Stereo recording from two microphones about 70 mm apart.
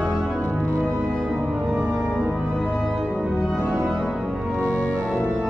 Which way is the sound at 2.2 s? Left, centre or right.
Centre.